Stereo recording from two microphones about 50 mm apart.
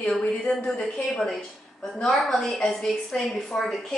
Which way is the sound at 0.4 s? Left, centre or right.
Centre.